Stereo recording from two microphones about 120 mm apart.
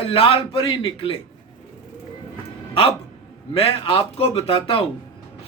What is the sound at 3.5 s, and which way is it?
A man's voice, 50° left (ahead or behind).